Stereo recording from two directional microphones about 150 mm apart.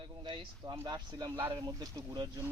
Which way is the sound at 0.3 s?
25° right (ahead or behind).